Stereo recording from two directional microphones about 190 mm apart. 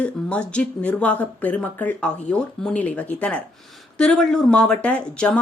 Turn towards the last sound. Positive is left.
turn(degrees=5)  # may be behind; listen again after turning